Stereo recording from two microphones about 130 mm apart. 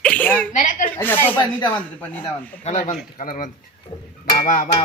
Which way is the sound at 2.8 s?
65° left (ahead or behind).